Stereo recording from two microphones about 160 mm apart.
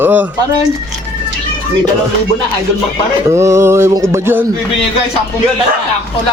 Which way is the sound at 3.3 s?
20° right (ahead or behind).